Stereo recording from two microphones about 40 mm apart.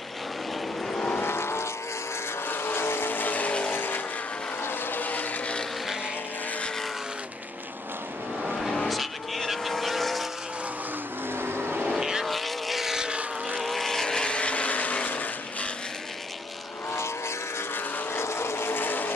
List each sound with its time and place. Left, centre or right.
0.9 s vehicle: left
1.2 s vehicle: left
2.4 s vehicle: left
3.7 s vehicle: left
5.0 s vehicle: left
8.5 s vehicle: centre
11.3 s vehicle: right
11.9 s vehicle: centre
12.3 s vehicle: centre
12.9 s vehicle: centre
13.6 s vehicle: centre; by 15.7 s left
18.1 s vehicle: left